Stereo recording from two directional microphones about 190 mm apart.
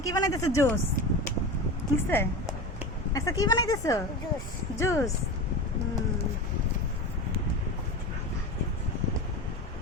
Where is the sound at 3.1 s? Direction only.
15° left (ahead or behind).